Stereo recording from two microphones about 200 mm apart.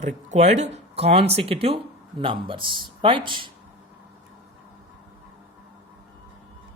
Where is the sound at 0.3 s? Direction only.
35° right (ahead or behind).